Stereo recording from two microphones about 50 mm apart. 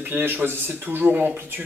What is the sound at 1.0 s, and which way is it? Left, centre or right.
Speech, right.